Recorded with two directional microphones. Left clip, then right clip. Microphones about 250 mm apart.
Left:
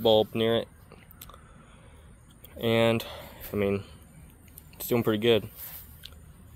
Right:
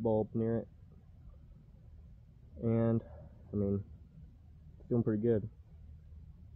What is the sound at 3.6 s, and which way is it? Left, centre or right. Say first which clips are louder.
Speech: left 9 dB; centre.